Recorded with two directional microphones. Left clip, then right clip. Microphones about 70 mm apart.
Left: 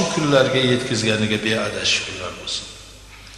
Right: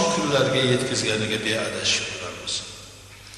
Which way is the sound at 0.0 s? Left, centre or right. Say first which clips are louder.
Left 4 dB; right.